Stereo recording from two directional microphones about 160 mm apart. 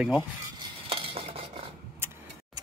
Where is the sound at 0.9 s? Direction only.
35° right (ahead or behind).